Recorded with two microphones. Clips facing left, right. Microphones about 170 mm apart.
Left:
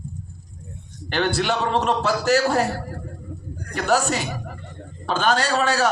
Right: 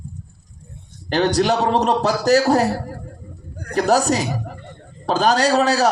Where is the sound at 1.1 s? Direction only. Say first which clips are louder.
Right 5 dB; 40° right (ahead or behind).